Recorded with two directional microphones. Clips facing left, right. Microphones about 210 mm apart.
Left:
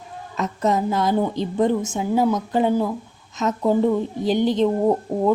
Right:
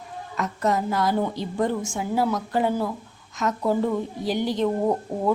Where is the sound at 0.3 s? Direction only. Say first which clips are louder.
Left 3 dB; 20° left (ahead or behind).